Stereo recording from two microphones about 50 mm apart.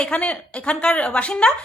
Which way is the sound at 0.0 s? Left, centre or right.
Left.